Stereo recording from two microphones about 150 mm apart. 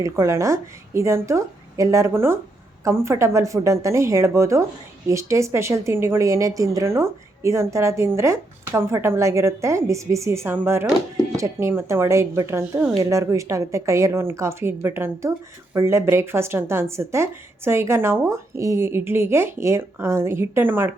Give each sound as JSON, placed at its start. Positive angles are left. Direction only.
{"t": 0.0, "sound": "a woman's voice", "side_deg": -20}